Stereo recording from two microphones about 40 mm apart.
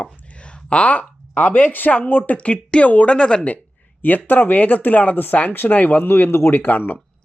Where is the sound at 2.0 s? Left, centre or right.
Left.